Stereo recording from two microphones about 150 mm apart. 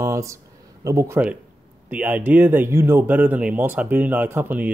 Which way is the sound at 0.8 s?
20° right (ahead or behind).